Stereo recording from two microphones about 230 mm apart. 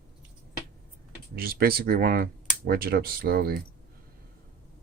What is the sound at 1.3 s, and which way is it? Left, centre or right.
Speech, right.